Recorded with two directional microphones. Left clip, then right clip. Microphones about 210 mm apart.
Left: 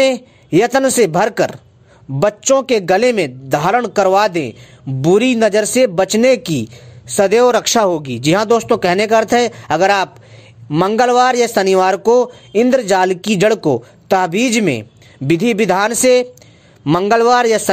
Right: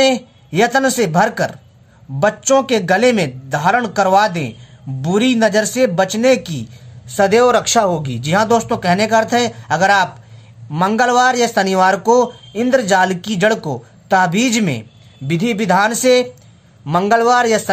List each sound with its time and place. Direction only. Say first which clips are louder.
0.0 s a man's voice: even; 40° left (ahead or behind)